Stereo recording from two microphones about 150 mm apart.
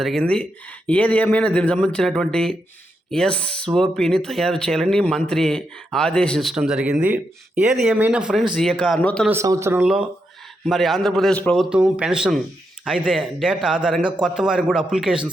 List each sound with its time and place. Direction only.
0.0 s speech: 5° left (ahead or behind)
9.3 s speech: 20° right (ahead or behind)
10.7 s speech: centre (ahead or behind)
11.7 s speech: 5° right (ahead or behind)